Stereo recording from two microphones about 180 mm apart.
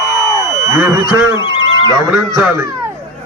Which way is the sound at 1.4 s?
25° left (ahead or behind).